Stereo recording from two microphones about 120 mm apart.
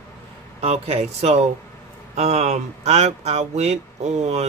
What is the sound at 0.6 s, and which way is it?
Speech, 60° right (ahead or behind).